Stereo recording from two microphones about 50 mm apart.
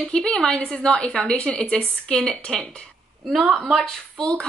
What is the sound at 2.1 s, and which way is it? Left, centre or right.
Speech, centre.